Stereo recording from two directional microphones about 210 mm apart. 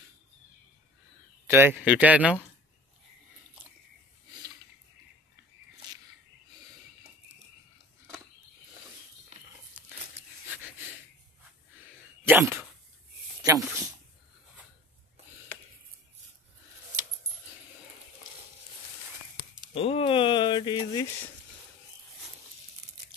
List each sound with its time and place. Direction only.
1.5 s speech: 10° right (ahead or behind)
5.8 s a sound: 20° right (ahead or behind)
12.3 s speech: 10° right (ahead or behind)
19.7 s speech: 25° left (ahead or behind)